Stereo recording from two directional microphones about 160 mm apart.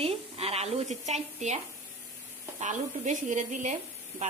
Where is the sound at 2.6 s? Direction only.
50° right (ahead or behind).